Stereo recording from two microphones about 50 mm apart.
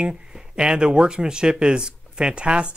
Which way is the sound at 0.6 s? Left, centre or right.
Centre.